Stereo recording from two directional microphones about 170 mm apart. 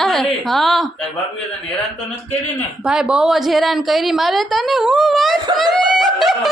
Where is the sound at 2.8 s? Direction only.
5° right (ahead or behind).